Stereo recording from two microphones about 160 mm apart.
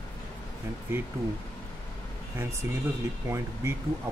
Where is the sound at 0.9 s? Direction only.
15° right (ahead or behind).